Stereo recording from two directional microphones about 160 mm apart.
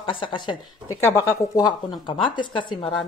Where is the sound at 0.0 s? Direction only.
30° left (ahead or behind).